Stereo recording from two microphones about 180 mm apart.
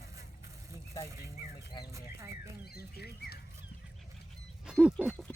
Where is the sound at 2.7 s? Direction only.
60° left (ahead or behind).